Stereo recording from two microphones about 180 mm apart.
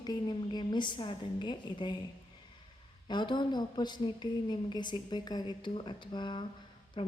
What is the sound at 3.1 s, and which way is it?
A woman's voice, 25° left (ahead or behind).